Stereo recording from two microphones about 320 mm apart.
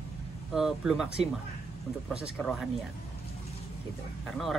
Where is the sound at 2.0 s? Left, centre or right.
Centre.